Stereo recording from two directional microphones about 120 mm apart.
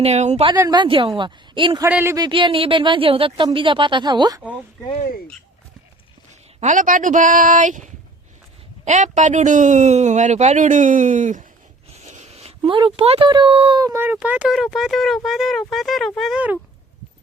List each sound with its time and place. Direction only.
0.0 s speech: 70° right (ahead or behind)
0.6 s a woman's voice: 35° right (ahead or behind)
0.9 s speech: 45° right (ahead or behind)
1.9 s speech: 15° right (ahead or behind)
2.1 s speech: 40° right (ahead or behind)
6.6 s speech: 90° right
12.0 s speech: 70° right (ahead or behind); by 13.7 s 45° right (ahead or behind)
13.7 s speech: 25° right (ahead or behind)
14.2 s speech: 10° right (ahead or behind)